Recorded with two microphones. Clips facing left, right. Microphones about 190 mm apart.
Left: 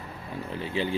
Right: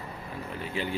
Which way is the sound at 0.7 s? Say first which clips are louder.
Left 4 dB; 30° left (ahead or behind).